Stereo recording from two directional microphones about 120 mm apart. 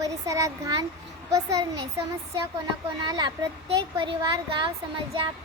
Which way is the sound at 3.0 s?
35° right (ahead or behind).